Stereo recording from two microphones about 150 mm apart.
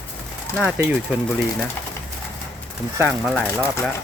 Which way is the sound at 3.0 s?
5° left (ahead or behind).